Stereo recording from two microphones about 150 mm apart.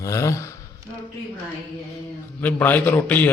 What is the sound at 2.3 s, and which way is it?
Speech, 10° left (ahead or behind).